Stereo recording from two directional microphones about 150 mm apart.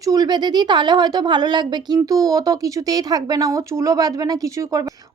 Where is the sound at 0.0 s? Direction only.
25° right (ahead or behind).